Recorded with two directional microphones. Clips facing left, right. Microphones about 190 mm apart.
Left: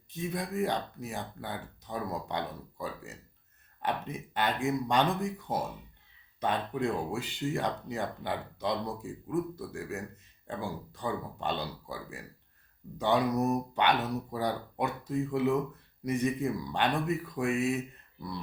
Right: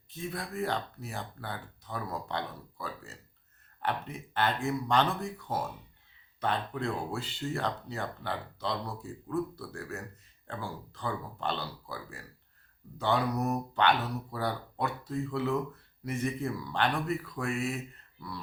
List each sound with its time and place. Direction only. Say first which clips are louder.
0.1 s speech: left 3 dB; 15° left (ahead or behind)